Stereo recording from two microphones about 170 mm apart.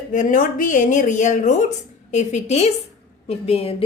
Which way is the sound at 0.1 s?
50° left (ahead or behind).